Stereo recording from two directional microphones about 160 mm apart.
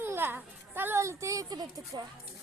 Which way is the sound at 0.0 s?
15° right (ahead or behind).